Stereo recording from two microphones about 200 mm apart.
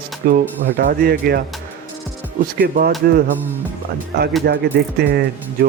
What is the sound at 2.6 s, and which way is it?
Speech, 45° right (ahead or behind).